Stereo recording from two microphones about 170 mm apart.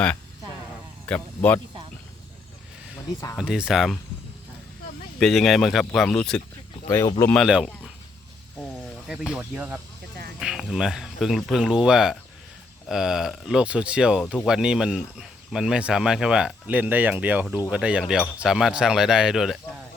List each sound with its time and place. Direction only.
1.0 s speech: 10° left (ahead or behind)
3.1 s speech: 20° left (ahead or behind)
3.3 s speech: 5° right (ahead or behind)
5.2 s speech: centre (ahead or behind)
6.8 s speech: 20° left (ahead or behind)
7.3 s speech: centre (ahead or behind)
9.0 s speech: 5° right (ahead or behind)